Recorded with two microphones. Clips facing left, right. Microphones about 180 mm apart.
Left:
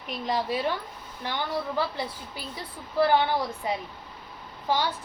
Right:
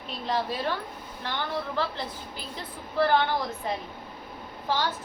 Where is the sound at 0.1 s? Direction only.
15° left (ahead or behind).